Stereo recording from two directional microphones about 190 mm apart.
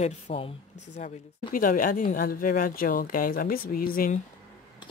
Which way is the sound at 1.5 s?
45° left (ahead or behind).